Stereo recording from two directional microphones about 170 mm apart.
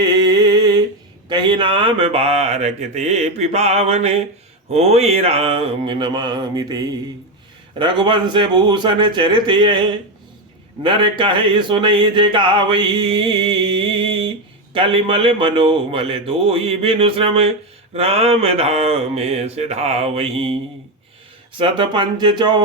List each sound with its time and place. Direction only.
0.0 s a sound: 25° right (ahead or behind)
1.3 s speech: 25° right (ahead or behind)
10.8 s speech: 30° right (ahead or behind)
21.6 s speech: 30° right (ahead or behind)